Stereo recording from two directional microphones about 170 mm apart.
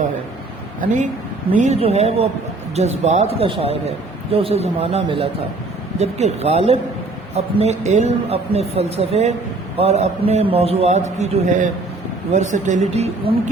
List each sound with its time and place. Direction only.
1.5 s a man's voice: 45° right (ahead or behind)